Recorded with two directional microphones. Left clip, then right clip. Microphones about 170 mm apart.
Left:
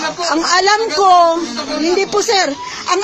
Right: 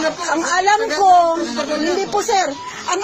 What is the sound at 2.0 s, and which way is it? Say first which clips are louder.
Speech: left 4 dB; 40° left (ahead or behind).